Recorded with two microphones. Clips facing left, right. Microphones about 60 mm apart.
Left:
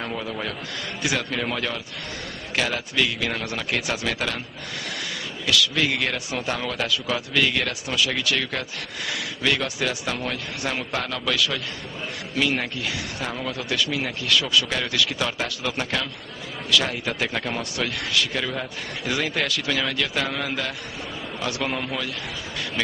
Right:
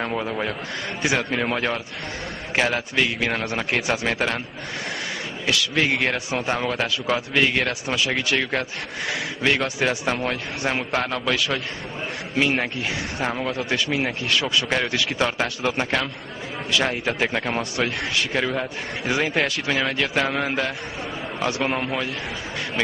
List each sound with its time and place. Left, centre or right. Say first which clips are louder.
0.0 s speech: right 4 dB; right
5.5 s speech: right 1 dB; right